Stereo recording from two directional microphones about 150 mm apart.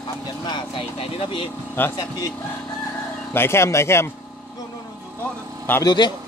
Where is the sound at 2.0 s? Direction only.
25° left (ahead or behind).